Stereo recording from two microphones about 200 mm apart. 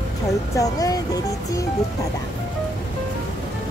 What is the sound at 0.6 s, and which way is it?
Speech, 15° left (ahead or behind).